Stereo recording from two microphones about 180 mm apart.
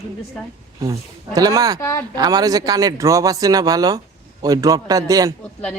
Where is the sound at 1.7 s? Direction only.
15° left (ahead or behind).